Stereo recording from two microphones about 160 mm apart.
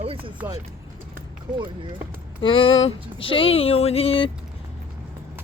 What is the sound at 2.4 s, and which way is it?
Speech, 35° left (ahead or behind).